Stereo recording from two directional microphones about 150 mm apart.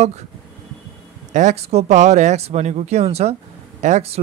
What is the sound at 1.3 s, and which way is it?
Speech, 50° right (ahead or behind).